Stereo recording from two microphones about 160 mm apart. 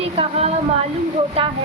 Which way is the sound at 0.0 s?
35° right (ahead or behind).